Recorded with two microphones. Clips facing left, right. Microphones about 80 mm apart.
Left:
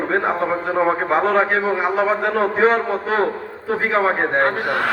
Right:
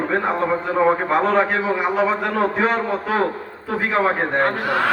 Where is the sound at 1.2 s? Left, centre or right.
Left.